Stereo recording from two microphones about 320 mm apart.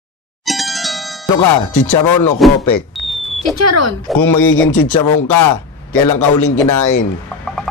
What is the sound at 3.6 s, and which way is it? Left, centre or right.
Speech, right.